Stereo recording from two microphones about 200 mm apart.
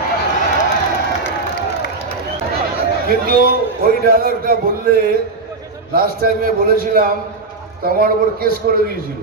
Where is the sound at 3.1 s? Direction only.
50° right (ahead or behind).